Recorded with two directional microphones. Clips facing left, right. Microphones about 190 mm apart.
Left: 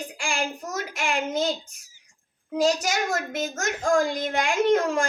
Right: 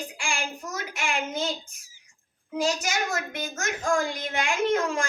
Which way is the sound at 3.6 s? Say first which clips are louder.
Left 3 dB; 40° left (ahead or behind).